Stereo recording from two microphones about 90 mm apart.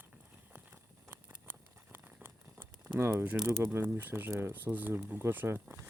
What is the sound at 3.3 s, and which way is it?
Speech, 20° right (ahead or behind).